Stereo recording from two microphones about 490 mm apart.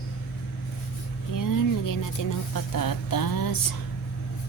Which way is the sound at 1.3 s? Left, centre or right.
Left.